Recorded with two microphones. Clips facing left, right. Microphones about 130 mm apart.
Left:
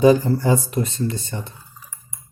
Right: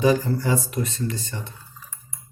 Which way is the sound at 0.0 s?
30° left (ahead or behind).